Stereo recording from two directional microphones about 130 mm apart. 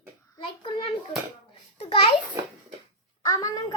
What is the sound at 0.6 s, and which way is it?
Hands, 40° left (ahead or behind).